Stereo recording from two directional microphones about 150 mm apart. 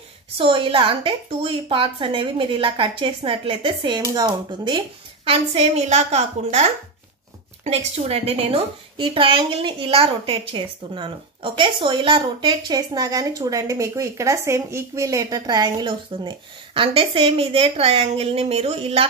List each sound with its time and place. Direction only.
0.4 s a woman's voice: 35° right (ahead or behind)